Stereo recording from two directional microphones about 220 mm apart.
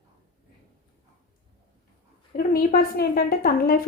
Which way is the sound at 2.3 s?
40° left (ahead or behind).